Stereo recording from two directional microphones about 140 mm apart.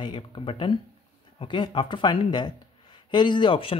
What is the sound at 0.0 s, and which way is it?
Speech, 35° left (ahead or behind).